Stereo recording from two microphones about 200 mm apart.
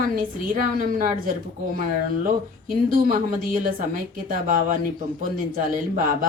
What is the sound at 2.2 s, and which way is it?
Speech, 45° right (ahead or behind).